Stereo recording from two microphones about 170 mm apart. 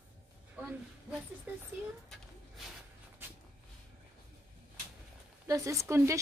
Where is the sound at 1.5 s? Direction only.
10° right (ahead or behind).